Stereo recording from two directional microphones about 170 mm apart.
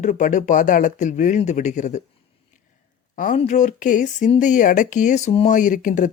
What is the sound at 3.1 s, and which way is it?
Speech, 50° left (ahead or behind).